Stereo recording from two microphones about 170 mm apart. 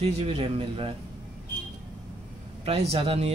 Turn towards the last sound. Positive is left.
turn(degrees=-35)  # may be behind; listen again after turning